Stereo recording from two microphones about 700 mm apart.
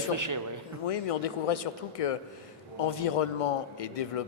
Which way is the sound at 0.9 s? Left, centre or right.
Left.